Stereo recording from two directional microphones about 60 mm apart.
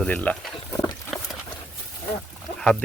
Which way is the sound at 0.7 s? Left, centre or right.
Left.